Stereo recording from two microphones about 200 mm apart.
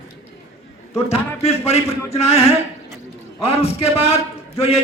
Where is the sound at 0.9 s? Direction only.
30° left (ahead or behind).